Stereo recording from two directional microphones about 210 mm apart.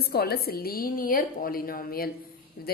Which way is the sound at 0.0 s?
50° left (ahead or behind).